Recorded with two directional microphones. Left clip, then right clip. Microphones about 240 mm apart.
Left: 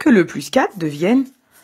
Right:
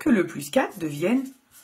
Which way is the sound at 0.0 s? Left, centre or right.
Left.